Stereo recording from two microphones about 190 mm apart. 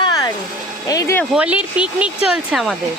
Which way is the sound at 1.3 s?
5° right (ahead or behind).